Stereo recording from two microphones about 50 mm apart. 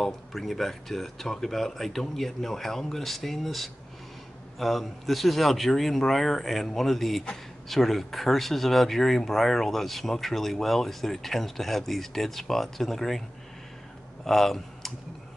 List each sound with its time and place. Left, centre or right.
0.0 s speech: centre
14.2 s speech: centre